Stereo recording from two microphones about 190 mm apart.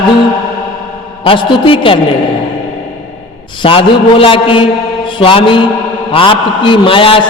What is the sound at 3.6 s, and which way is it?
A man's voice, 30° left (ahead or behind).